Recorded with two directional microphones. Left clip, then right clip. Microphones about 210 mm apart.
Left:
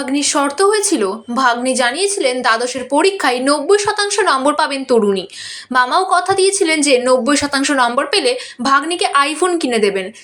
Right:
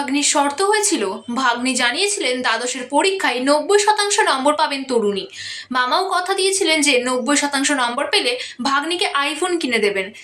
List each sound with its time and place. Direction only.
0.1 s a woman's voice: 15° left (ahead or behind)